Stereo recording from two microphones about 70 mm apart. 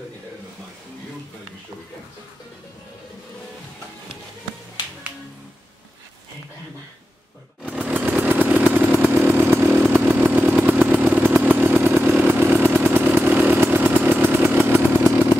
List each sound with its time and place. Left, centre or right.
7.8 s chainsaw: right
12.0 s motorcycle: right